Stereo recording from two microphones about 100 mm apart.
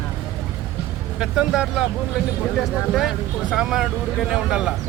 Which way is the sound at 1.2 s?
5° right (ahead or behind).